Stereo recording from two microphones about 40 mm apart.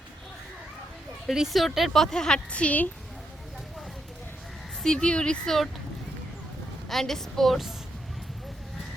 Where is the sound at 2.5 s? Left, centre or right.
Left.